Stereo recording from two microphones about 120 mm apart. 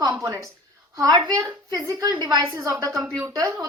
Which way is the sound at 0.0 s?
30° right (ahead or behind).